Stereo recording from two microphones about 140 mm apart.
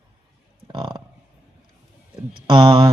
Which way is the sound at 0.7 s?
35° right (ahead or behind).